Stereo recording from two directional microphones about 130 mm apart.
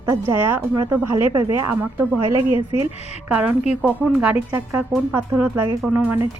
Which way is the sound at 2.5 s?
40° left (ahead or behind).